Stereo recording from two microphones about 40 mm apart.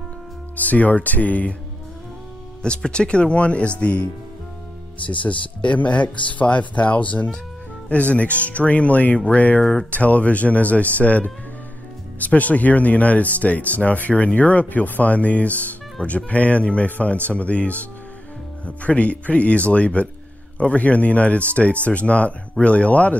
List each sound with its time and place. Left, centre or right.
0.6 s speech: left
2.6 s speech: left
5.2 s speech: left
9.6 s speech: centre
9.8 s speech: left